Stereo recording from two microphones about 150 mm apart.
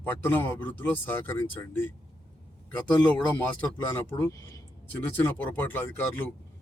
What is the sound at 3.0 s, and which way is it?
A man's voice, 10° left (ahead or behind).